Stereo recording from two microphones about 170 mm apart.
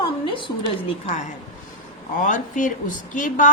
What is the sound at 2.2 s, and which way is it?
A woman's voice, 50° left (ahead or behind).